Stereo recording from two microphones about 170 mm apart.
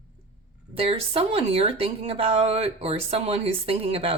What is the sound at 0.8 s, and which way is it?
Speech, 35° right (ahead or behind).